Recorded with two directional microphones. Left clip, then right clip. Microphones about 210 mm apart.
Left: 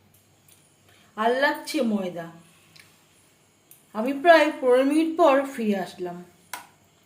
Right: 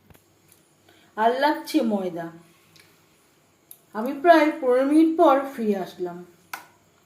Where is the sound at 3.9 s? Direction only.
20° left (ahead or behind).